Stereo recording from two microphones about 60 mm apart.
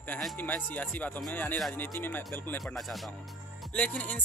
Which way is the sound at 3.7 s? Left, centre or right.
Left.